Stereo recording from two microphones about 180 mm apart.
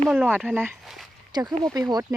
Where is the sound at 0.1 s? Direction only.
5° right (ahead or behind).